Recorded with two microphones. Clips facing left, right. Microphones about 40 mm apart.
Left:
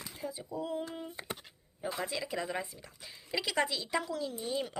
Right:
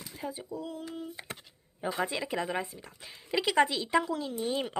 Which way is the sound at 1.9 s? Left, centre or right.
Right.